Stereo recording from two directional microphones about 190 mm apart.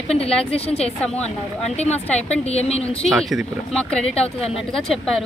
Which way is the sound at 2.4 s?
35° left (ahead or behind).